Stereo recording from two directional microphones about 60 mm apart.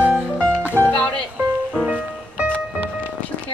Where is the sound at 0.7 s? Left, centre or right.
Left.